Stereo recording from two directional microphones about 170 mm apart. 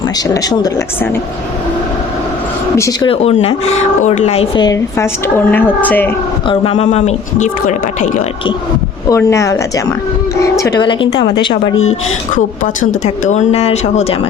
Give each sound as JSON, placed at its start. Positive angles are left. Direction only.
{"t": 2.7, "sound": "speech", "side_deg": 15}
{"t": 3.1, "sound": "speech", "side_deg": 40}
{"t": 4.5, "sound": "speech", "side_deg": 20}
{"t": 5.5, "sound": "speech", "side_deg": 10}
{"t": 6.5, "sound": "speech", "side_deg": 35}
{"t": 9.0, "sound": "speech", "side_deg": 15}
{"t": 12.3, "sound": "speech", "side_deg": 50}